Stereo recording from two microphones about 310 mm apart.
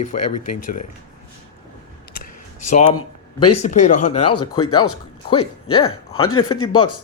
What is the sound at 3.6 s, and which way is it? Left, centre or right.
Speech, left.